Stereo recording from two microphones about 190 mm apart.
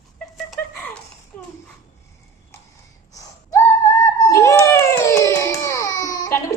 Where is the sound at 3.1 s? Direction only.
15° left (ahead or behind).